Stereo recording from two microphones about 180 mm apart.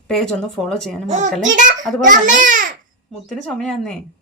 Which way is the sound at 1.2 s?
45° right (ahead or behind).